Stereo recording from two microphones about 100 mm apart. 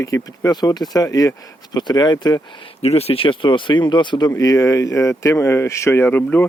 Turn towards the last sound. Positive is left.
turn(degrees=20)  # may be behind; listen again after turning